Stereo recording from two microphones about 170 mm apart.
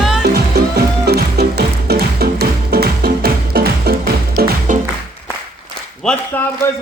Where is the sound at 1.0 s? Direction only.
70° right (ahead or behind).